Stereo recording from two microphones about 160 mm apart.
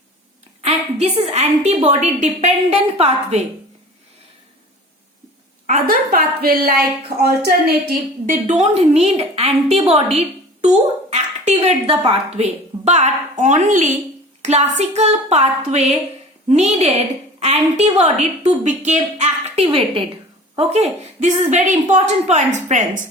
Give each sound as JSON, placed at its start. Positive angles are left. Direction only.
{"t": 0.6, "sound": "a woman's voice", "side_deg": -40}
{"t": 5.6, "sound": "a woman's voice", "side_deg": -60}
{"t": 8.3, "sound": "a woman's voice", "side_deg": -45}